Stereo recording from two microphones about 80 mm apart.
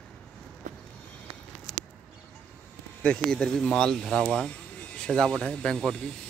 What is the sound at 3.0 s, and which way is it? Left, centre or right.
Speech, centre.